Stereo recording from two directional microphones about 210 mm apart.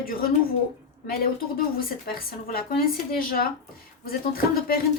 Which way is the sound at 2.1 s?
45° left (ahead or behind).